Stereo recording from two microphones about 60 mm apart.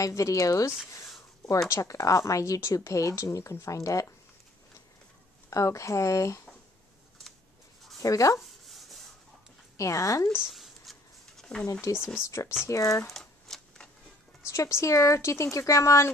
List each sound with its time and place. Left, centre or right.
0.0 s speech: left
1.7 s speech: left
5.5 s speech: left
8.0 s speech: left
8.4 s rub: centre
9.8 s speech: left
10.5 s a sound: centre
11.8 s speech: left
13.0 s shuffling cards: centre
14.4 s speech: left